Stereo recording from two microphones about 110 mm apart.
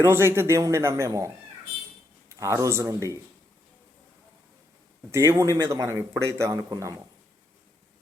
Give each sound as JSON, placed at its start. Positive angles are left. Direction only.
{"t": 0.0, "sound": "speech", "side_deg": -25}
{"t": 2.3, "sound": "speech", "side_deg": -30}
{"t": 5.1, "sound": "speech", "side_deg": -25}